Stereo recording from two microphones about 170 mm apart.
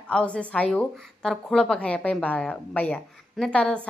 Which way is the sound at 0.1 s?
5° left (ahead or behind).